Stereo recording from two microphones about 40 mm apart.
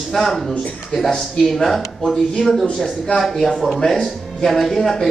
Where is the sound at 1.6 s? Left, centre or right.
Centre.